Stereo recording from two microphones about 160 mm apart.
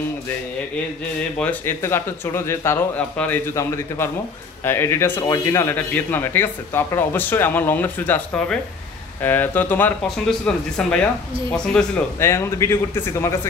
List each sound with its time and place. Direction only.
1.4 s speech: 10° left (ahead or behind)
12.2 s speech: 15° left (ahead or behind)